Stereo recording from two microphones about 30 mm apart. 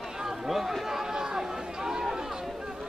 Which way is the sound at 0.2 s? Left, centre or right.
Centre.